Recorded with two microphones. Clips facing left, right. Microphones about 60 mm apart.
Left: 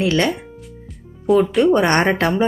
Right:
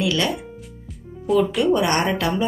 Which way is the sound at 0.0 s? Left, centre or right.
Left.